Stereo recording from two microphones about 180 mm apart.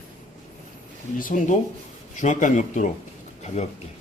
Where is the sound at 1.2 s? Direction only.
45° left (ahead or behind).